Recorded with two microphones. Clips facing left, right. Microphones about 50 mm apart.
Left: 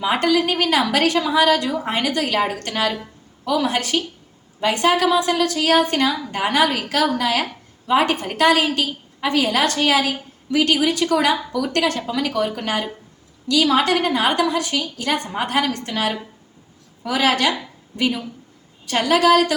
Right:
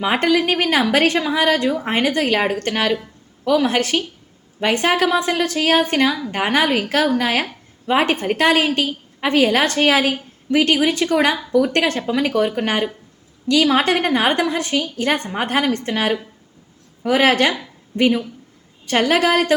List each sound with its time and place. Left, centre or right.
0.0 s a woman's voice: right